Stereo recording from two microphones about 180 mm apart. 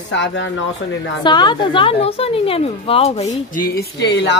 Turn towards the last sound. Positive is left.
turn(degrees=75)  # may be behind; listen again after turning